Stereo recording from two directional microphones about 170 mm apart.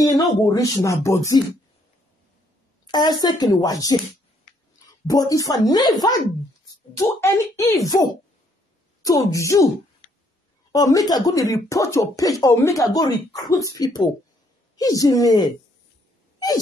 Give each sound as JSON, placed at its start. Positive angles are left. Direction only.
{"t": 0.5, "sound": "speech", "side_deg": 20}
{"t": 2.9, "sound": "speech", "side_deg": 25}
{"t": 5.0, "sound": "speech", "side_deg": 20}
{"t": 9.3, "sound": "speech", "side_deg": 20}
{"t": 10.7, "sound": "speech", "side_deg": 20}